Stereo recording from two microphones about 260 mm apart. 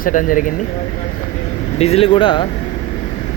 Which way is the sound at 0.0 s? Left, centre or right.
Left.